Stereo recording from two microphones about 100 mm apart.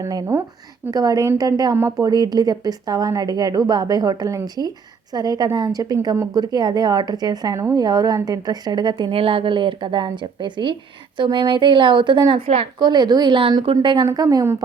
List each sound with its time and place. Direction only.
0.0 s a woman's voice: 35° right (ahead or behind)
1.7 s speech: 25° right (ahead or behind)
2.0 s a woman's voice: 40° right (ahead or behind); by 12.6 s 70° right (ahead or behind)
12.8 s a woman's voice: 45° right (ahead or behind)
13.5 s a woman's voice: 55° right (ahead or behind)
14.1 s a woman's voice: 40° right (ahead or behind)